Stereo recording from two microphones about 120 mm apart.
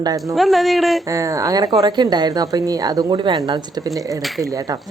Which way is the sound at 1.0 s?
25° right (ahead or behind).